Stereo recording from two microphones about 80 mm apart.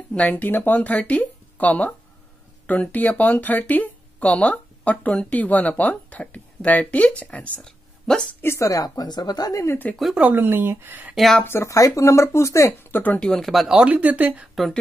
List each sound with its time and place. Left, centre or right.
0.1 s speech: centre
8.4 s speech: left
10.1 s speech: right
11.1 s speech: centre
11.4 s speech: left
11.7 s speech: left
12.9 s speech: left
13.2 s speech: centre
13.7 s speech: centre